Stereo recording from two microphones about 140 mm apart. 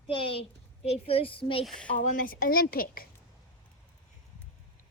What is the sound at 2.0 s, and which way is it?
A woman's voice, 80° left.